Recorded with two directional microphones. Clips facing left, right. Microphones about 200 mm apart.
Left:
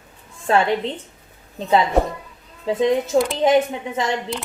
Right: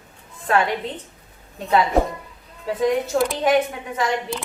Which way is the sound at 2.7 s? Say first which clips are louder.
Left 2 dB; 25° left (ahead or behind).